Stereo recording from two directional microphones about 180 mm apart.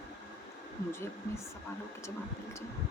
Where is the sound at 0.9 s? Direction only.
15° left (ahead or behind).